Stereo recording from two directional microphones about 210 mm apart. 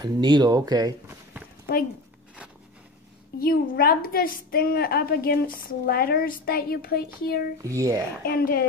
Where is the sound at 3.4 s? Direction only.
45° left (ahead or behind).